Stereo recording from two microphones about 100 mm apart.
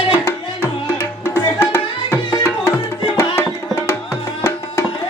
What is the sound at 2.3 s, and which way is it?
Music, 25° left (ahead or behind).